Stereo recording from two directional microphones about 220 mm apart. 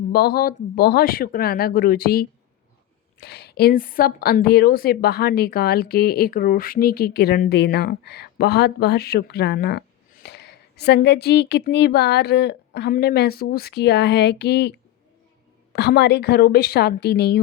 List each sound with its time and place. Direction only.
0.1 s a woman's voice: 45° left (ahead or behind)